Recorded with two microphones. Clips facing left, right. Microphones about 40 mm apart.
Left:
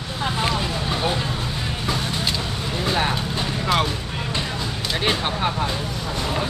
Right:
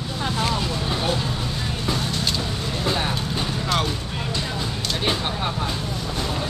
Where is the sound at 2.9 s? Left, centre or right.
Centre.